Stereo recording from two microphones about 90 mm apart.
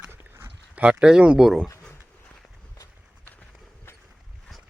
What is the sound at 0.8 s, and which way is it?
Speech, 10° right (ahead or behind).